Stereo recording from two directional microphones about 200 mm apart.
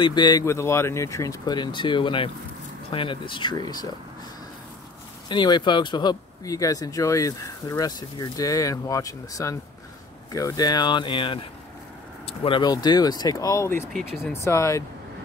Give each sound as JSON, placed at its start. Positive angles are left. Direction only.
{"t": 0.0, "sound": "speech", "side_deg": 20}
{"t": 5.3, "sound": "speech", "side_deg": 20}